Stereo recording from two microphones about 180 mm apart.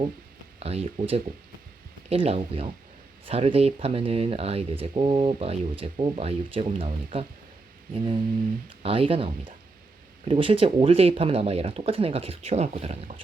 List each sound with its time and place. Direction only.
0.6 s speech: 35° right (ahead or behind)
7.9 s a sound: 25° right (ahead or behind)
8.8 s speech: 30° right (ahead or behind)